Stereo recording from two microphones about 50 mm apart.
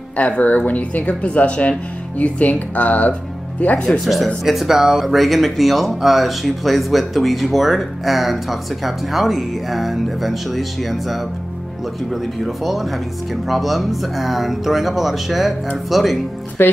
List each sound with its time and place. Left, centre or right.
0.2 s speech: left
4.0 s speech: centre
16.6 s speech: left